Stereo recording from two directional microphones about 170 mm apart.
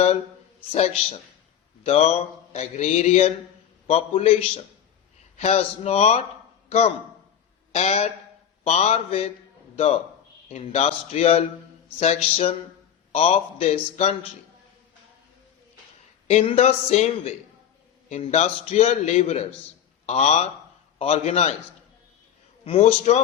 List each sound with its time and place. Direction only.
0.7 s a man's voice: 35° left (ahead or behind)
16.2 s speech: 40° left (ahead or behind)
22.6 s speech: 35° left (ahead or behind)